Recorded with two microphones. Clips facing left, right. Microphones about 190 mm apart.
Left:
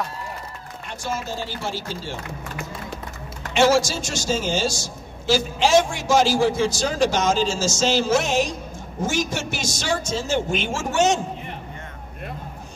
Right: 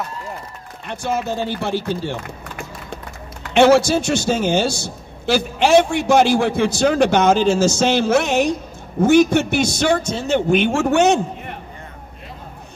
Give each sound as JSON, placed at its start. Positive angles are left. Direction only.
{"t": 0.8, "sound": "a man's voice", "side_deg": -60}
{"t": 3.5, "sound": "a man's voice", "side_deg": -60}